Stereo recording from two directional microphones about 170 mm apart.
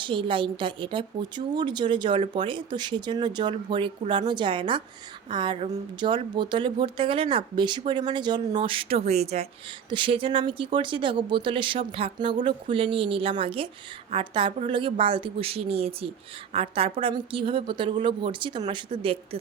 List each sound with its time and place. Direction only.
0.0 s a woman's voice: 30° right (ahead or behind)